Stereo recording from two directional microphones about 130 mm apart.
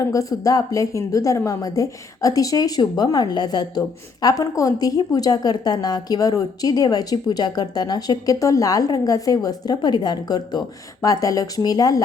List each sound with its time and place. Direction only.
0.1 s a woman's voice: 25° left (ahead or behind)